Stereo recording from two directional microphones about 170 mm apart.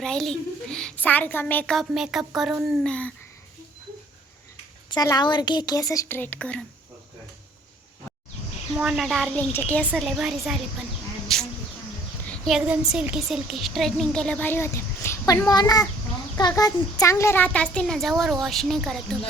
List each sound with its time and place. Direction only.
0.0 s a woman's voice: 5° left (ahead or behind)
4.9 s a woman's voice: 25° left (ahead or behind); by 6.7 s 5° left (ahead or behind)
8.7 s a woman's voice: 5° right (ahead or behind)
9.5 s speech: 10° left (ahead or behind)
9.9 s a woman's voice: 5° right (ahead or behind)
11.3 s insect: centre (ahead or behind)
12.3 s a woman's voice: centre (ahead or behind)